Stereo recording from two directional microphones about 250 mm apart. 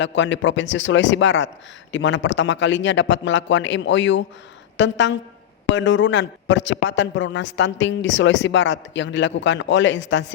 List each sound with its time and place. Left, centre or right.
0.0 s a man's voice: left